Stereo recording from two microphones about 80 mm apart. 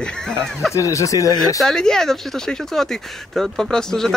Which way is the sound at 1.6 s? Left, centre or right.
Centre.